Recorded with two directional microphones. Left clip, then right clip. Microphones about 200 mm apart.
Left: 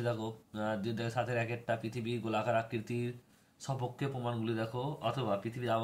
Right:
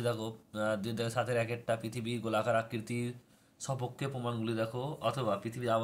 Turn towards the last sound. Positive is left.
turn(degrees=-10)  # may be behind; listen again after turning